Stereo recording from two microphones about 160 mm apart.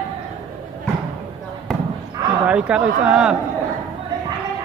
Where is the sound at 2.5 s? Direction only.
5° right (ahead or behind).